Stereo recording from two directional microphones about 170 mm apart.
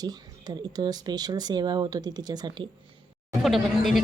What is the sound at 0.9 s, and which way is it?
Speech, 25° right (ahead or behind).